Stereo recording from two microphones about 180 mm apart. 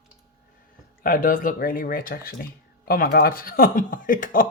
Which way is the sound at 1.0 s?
50° left (ahead or behind).